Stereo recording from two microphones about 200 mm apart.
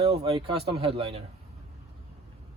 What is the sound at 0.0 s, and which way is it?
Speech, 30° right (ahead or behind).